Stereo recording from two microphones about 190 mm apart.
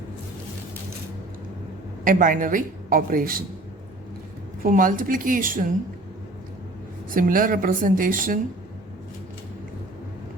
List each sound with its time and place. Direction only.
2.0 s a woman's voice: 45° right (ahead or behind)
4.6 s a woman's voice: 45° right (ahead or behind)
7.1 s a woman's voice: 45° right (ahead or behind)